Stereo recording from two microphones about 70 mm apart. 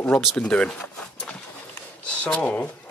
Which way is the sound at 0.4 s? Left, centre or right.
Centre.